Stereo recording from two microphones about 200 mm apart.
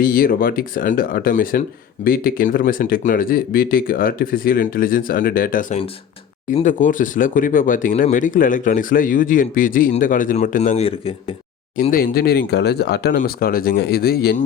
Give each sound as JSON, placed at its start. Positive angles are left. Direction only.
{"t": 0.0, "sound": "speech", "side_deg": 45}
{"t": 11.8, "sound": "speech", "side_deg": 45}